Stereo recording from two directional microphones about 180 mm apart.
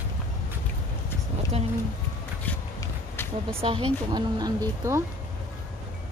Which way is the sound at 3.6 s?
30° right (ahead or behind).